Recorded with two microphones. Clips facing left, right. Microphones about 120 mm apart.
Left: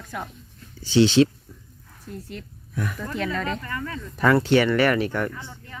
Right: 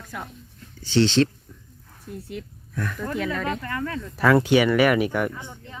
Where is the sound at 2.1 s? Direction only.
10° right (ahead or behind).